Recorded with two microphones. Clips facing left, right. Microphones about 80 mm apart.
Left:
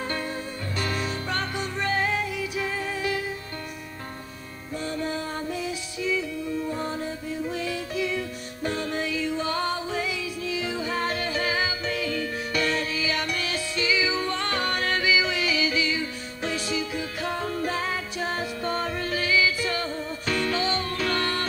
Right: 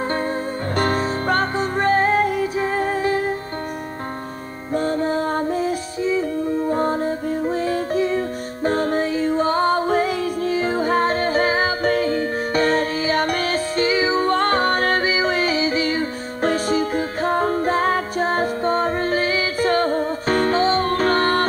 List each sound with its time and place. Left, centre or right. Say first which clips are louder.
0.7 s music: right 9 dB; right
4.7 s music: right 9 dB; right